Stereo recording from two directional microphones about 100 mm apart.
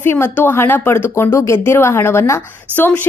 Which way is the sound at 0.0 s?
20° left (ahead or behind).